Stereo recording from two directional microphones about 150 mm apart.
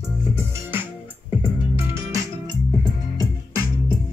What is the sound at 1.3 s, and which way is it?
Music, 15° right (ahead or behind).